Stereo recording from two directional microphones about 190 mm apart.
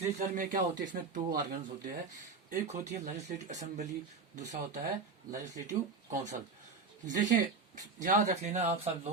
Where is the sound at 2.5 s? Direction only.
40° right (ahead or behind).